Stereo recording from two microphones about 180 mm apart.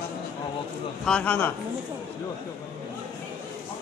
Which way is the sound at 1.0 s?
5° left (ahead or behind).